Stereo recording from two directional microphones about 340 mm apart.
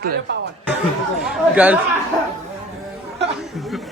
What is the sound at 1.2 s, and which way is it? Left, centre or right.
Chatter, centre.